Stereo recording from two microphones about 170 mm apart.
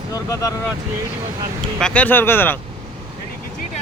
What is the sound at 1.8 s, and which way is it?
Speech, 5° left (ahead or behind).